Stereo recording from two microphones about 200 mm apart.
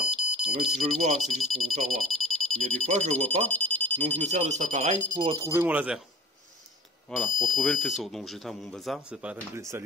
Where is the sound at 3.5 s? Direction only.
10° left (ahead or behind).